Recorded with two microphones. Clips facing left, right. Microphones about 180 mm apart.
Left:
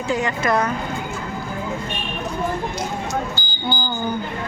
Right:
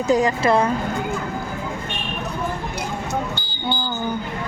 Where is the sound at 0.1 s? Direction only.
35° right (ahead or behind).